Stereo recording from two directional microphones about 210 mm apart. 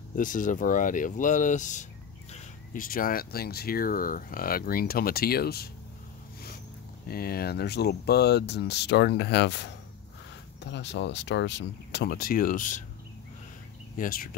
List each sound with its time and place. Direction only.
0.1 s speech: 40° left (ahead or behind)
7.1 s speech: 45° left (ahead or behind)
13.9 s speech: 45° left (ahead or behind)